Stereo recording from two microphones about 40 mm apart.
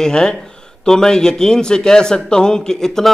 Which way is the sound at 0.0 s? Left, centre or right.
Centre.